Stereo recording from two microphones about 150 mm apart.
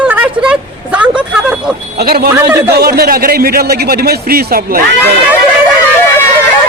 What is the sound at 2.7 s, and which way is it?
A man's voice, 90° right.